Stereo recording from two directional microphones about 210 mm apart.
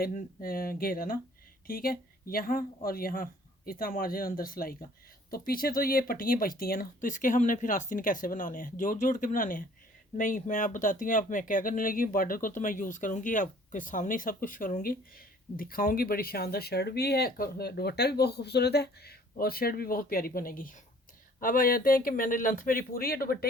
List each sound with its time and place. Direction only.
0.0 s speech: 40° left (ahead or behind)